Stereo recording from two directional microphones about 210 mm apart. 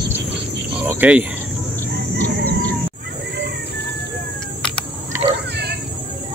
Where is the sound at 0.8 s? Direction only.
5° right (ahead or behind).